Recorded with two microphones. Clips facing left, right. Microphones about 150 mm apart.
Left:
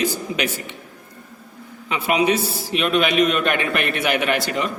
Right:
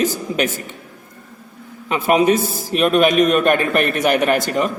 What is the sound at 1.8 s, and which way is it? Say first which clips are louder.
A man's voice: right 4 dB; 45° right (ahead or behind).